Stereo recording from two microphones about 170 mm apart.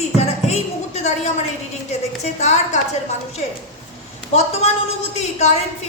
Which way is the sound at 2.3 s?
40° left (ahead or behind).